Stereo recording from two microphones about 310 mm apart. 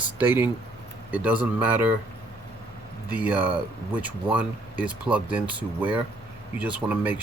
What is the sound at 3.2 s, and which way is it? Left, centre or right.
A man's voice, centre.